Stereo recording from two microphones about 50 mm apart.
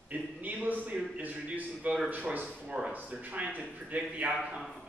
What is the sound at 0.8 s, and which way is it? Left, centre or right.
A man's voice, right.